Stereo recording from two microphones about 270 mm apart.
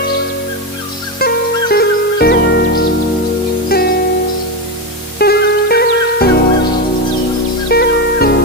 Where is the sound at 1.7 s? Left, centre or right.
Left.